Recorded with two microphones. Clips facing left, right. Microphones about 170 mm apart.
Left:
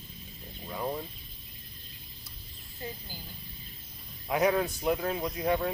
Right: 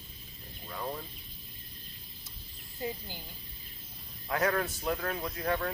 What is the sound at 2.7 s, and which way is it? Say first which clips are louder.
Speech: right 4 dB; 20° right (ahead or behind).